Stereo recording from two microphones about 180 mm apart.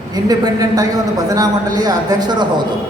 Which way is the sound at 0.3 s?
20° right (ahead or behind).